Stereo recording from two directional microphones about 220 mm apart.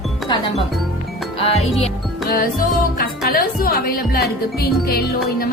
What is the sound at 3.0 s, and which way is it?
Speech, 45° left (ahead or behind).